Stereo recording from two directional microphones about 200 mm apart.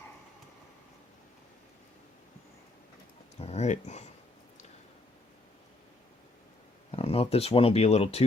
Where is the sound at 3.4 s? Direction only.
30° left (ahead or behind).